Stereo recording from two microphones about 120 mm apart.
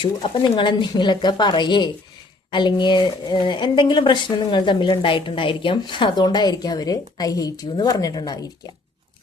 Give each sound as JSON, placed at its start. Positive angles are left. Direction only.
{"t": 0.0, "sound": "a woman's voice", "side_deg": 45}